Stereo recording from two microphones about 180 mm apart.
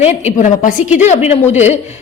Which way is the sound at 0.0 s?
40° left (ahead or behind).